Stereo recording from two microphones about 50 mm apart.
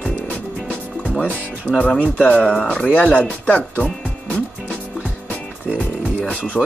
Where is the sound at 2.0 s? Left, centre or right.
Left.